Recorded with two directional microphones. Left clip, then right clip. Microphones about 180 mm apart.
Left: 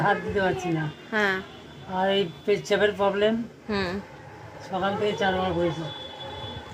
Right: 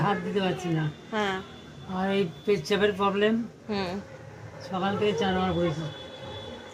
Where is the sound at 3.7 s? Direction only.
25° left (ahead or behind).